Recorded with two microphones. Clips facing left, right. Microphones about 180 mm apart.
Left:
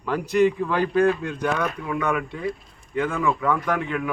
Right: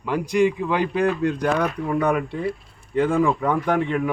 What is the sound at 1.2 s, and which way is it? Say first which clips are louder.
A man's voice: right 4 dB; 40° right (ahead or behind).